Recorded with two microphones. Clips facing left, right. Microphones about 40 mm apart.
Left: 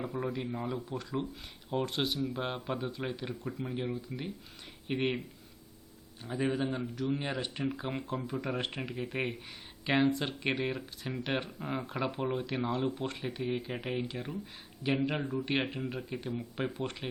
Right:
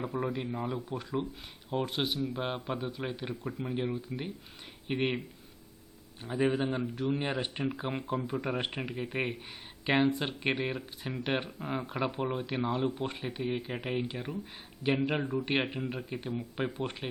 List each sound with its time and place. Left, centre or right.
0.2 s speech: centre
6.2 s speech: centre
11.9 s speech: centre